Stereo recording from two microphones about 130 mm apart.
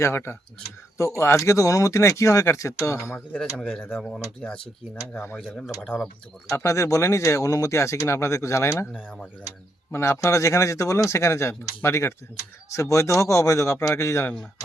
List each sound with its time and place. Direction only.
0.0 s speech: 20° left (ahead or behind)
3.3 s speech: 5° left (ahead or behind)
5.1 s speech: 15° left (ahead or behind)
5.5 s speech: centre (ahead or behind)
6.5 s speech: 20° left (ahead or behind)
9.9 s speech: 20° left (ahead or behind)